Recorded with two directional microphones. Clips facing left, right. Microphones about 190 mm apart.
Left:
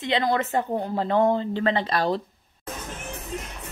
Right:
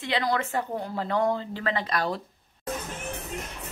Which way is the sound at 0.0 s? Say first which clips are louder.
Left 3 dB; 20° left (ahead or behind).